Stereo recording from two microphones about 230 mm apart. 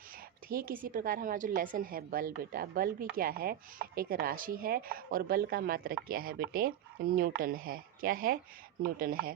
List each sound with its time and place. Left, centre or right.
0.4 s speech: right